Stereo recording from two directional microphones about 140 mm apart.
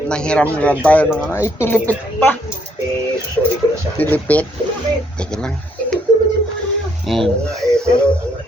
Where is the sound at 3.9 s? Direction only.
10° left (ahead or behind).